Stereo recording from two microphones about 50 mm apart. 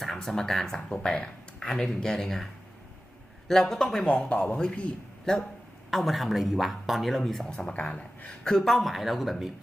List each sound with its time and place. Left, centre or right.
0.0 s speech: centre
3.5 s speech: centre
4.0 s speech: left
5.9 s speech: centre
7.7 s speech: left
8.4 s speech: centre